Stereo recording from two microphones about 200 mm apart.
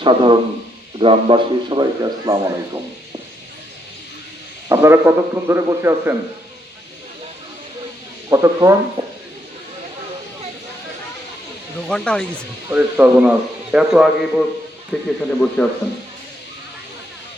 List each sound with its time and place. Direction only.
0.0 s a man's voice: 25° right (ahead or behind)
4.7 s a man's voice: 15° right (ahead or behind)
8.3 s a man's voice: 15° right (ahead or behind)
11.9 s a man's voice: 5° left (ahead or behind)
12.6 s a man's voice: 10° right (ahead or behind); by 15.7 s 5° left (ahead or behind)